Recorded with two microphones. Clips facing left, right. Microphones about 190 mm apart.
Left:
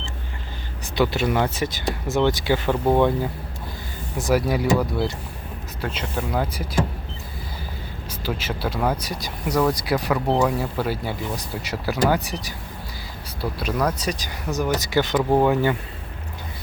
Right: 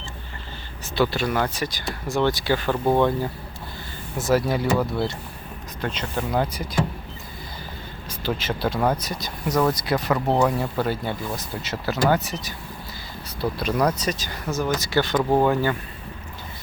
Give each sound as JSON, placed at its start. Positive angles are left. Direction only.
{"t": 0.9, "sound": "speech", "side_deg": 20}
{"t": 4.4, "sound": "speech", "side_deg": 10}
{"t": 8.2, "sound": "speech", "side_deg": 10}
{"t": 14.1, "sound": "speech", "side_deg": 15}